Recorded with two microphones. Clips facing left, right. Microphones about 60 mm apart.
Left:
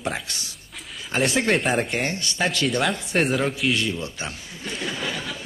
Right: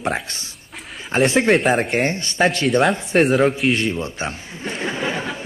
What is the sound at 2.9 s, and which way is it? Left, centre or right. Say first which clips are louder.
Speech: right 6 dB; centre.